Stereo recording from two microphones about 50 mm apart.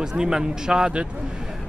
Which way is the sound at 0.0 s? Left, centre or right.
Centre.